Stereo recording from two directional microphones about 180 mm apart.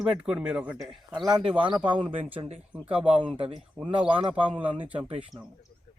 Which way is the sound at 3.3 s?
30° right (ahead or behind).